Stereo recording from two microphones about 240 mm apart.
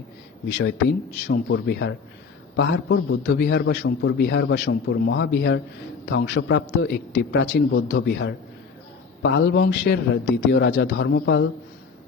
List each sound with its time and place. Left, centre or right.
0.4 s a man's voice: left